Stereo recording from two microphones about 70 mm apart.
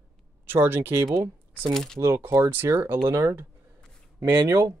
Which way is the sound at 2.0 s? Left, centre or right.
Right.